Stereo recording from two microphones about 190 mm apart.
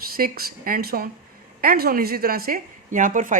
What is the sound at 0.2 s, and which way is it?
A woman's voice, 50° right (ahead or behind).